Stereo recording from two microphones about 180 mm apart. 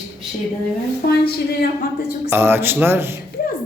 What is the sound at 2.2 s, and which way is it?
Speech, 10° right (ahead or behind).